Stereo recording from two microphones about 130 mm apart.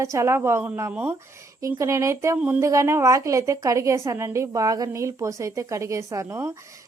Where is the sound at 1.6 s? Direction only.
20° right (ahead or behind).